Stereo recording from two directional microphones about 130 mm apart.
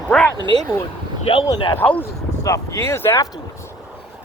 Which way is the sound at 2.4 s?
25° left (ahead or behind).